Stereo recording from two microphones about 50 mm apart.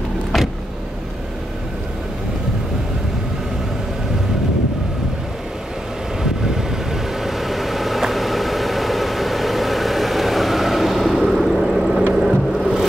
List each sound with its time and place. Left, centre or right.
6.2 s vehicle: centre